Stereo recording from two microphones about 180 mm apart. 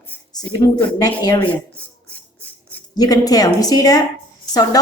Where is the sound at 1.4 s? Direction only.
10° left (ahead or behind).